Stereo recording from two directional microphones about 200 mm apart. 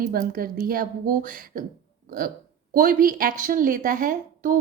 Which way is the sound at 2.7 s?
45° right (ahead or behind).